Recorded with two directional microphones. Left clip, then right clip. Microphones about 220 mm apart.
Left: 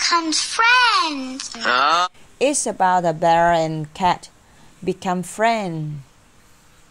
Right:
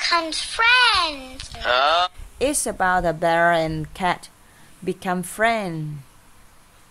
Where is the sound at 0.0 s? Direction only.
Centre (ahead or behind).